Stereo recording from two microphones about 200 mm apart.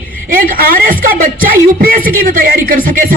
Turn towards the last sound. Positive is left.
turn(degrees=-45)  # may be behind; listen again after turning